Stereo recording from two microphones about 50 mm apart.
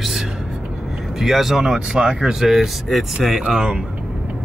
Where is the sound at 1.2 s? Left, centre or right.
Centre.